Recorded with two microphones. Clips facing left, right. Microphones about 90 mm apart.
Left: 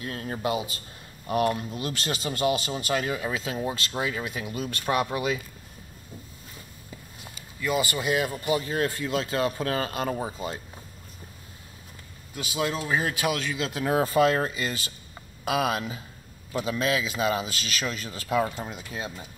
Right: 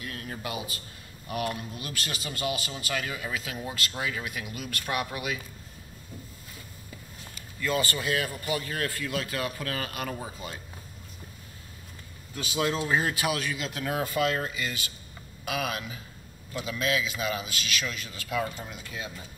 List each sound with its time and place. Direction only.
0.0 s a man's voice: 30° left (ahead or behind)
7.6 s a man's voice: 15° left (ahead or behind)
12.4 s speech: 10° left (ahead or behind)
13.7 s a man's voice: 25° left (ahead or behind)